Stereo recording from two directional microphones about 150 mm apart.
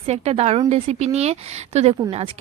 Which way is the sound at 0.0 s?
45° right (ahead or behind).